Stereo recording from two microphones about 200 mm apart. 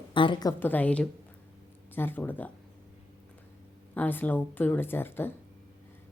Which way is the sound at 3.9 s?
10° left (ahead or behind).